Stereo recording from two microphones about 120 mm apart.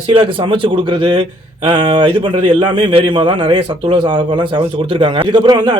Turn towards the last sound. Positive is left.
turn(degrees=-40)  # may be behind; listen again after turning